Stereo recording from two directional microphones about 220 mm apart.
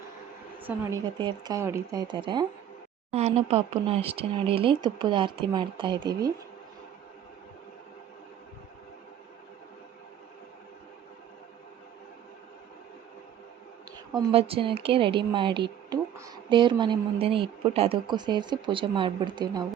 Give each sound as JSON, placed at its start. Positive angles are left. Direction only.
{"t": 0.6, "sound": "speech", "side_deg": -15}
{"t": 14.1, "sound": "speech", "side_deg": -25}